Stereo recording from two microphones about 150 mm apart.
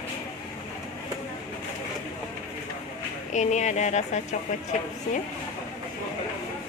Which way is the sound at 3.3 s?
50° left (ahead or behind).